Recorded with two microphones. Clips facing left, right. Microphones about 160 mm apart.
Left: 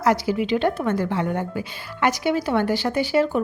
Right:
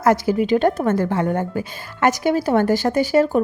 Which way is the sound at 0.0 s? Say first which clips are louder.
Right 4 dB; 50° right (ahead or behind).